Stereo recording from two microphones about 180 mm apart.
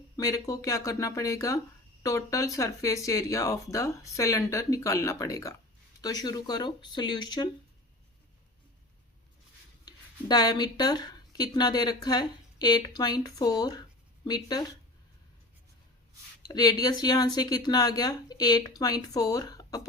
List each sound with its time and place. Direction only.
0.2 s speech: 20° left (ahead or behind)
9.8 s speech: 20° left (ahead or behind)
16.4 s speech: 20° left (ahead or behind)